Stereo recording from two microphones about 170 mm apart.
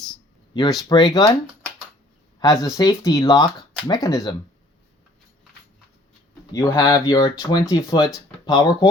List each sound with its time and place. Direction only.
0.5 s speech: 25° left (ahead or behind)
2.6 s speech: 20° left (ahead or behind)
6.5 s speech: 20° left (ahead or behind)